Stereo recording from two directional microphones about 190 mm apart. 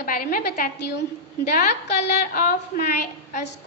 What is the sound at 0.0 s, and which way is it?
A child's voice, 50° left (ahead or behind).